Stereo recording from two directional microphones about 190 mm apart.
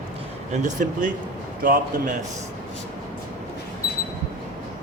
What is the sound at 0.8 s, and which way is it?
A man's voice, 50° right (ahead or behind).